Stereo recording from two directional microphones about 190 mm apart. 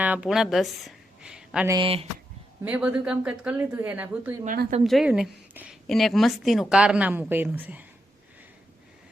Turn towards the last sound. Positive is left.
turn(degrees=-10)  # may be behind; listen again after turning